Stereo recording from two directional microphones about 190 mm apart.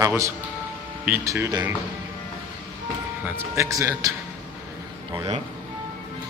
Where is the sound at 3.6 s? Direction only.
15° right (ahead or behind).